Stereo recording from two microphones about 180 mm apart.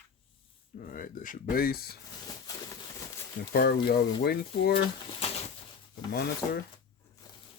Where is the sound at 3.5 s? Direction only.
55° left (ahead or behind).